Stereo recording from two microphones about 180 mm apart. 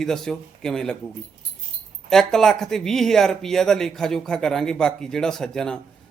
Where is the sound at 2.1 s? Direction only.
Centre (ahead or behind).